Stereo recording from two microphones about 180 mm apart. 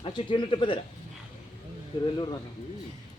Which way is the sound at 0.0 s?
25° left (ahead or behind).